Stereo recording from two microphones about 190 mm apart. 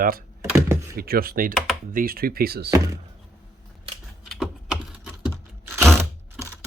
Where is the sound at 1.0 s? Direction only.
50° right (ahead or behind).